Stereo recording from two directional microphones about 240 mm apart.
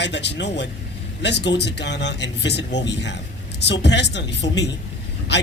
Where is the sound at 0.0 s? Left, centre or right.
Left.